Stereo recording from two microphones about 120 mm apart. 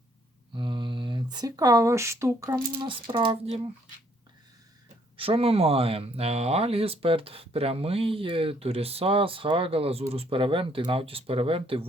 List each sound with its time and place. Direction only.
0.5 s speech: 40° right (ahead or behind); by 2.6 s 25° right (ahead or behind)
2.8 s speech: 45° right (ahead or behind)
5.1 s speech: 50° right (ahead or behind)